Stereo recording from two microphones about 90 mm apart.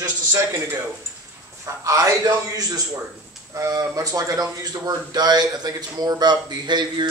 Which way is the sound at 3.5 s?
40° right (ahead or behind).